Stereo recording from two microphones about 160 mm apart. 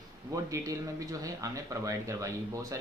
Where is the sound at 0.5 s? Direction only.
20° right (ahead or behind).